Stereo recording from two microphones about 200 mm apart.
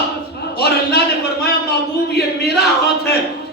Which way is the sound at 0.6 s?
55° left (ahead or behind).